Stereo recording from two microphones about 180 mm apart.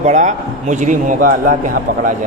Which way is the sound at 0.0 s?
40° right (ahead or behind).